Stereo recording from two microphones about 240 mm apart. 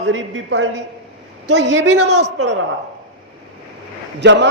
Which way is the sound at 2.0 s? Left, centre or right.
Right.